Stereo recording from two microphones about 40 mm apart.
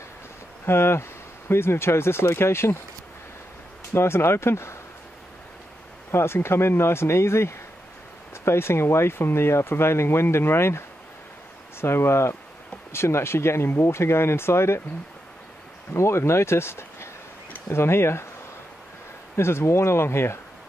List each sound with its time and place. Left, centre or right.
0.7 s speech: left
3.9 s speech: left
6.1 s speech: left
11.8 s speech: left
15.9 s speech: left
19.4 s speech: left